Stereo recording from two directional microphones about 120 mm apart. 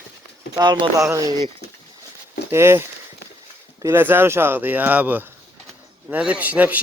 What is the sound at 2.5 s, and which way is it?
Cowbell, 20° right (ahead or behind).